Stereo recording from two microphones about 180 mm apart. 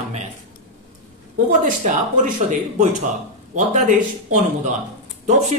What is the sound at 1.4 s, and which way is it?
A man's voice, 50° right (ahead or behind).